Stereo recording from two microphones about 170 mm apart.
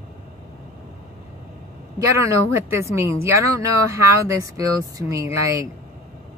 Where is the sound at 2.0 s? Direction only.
15° right (ahead or behind).